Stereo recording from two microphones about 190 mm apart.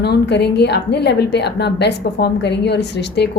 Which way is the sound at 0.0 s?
60° left (ahead or behind).